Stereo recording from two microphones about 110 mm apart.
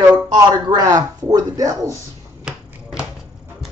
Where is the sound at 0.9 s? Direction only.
35° right (ahead or behind).